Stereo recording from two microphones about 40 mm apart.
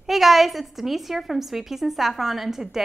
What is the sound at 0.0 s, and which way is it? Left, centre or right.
A woman's voice, centre.